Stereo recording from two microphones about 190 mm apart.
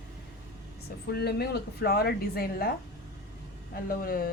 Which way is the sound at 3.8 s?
50° left (ahead or behind).